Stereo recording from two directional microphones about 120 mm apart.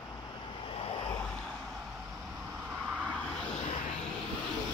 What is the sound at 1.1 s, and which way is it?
Vehicle, 10° left (ahead or behind).